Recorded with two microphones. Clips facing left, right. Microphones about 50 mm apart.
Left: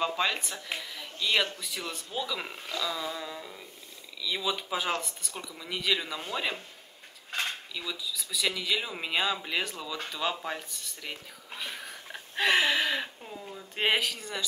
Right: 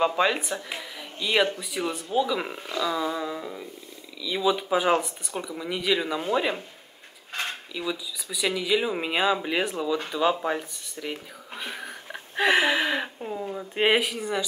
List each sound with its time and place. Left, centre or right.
0.0 s speech: centre
7.7 s speech: centre
11.6 s a sound: centre
13.7 s speech: centre